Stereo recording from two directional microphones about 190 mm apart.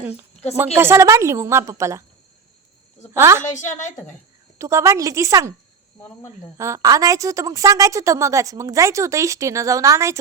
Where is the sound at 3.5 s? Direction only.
40° left (ahead or behind).